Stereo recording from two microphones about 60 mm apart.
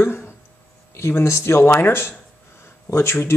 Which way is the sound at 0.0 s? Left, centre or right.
Left.